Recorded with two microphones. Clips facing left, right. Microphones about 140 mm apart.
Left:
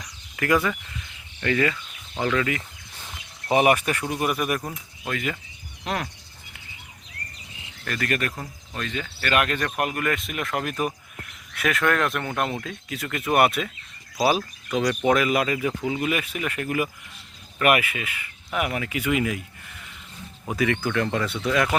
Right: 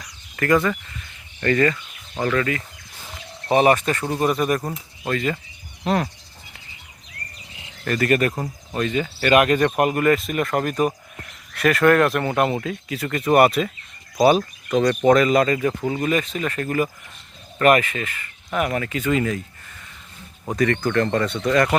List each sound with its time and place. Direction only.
0.0 s a sound: 10° left (ahead or behind)
1.4 s speech: 5° left (ahead or behind)
3.7 s speech: 10° left (ahead or behind)
4.0 s speech: 30° right (ahead or behind)
5.0 s speech: 5° left (ahead or behind)
7.9 s speech: 5° right (ahead or behind)
8.4 s speech: 25° right (ahead or behind)
8.9 s speech: 10° right (ahead or behind); by 19.4 s 10° left (ahead or behind)
20.6 s speech: 5° left (ahead or behind)